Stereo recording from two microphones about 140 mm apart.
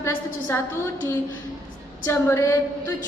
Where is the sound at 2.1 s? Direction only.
20° left (ahead or behind).